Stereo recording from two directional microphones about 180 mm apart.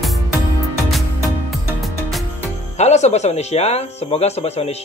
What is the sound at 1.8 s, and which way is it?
Music, centre (ahead or behind).